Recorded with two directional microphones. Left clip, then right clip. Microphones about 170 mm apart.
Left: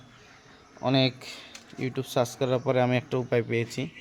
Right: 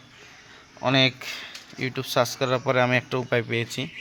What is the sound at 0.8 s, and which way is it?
Speech, 5° left (ahead or behind).